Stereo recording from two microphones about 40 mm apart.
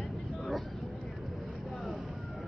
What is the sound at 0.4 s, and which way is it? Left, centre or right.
Vehicle, centre.